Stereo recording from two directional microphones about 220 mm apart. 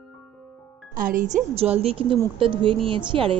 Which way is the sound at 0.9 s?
40° right (ahead or behind).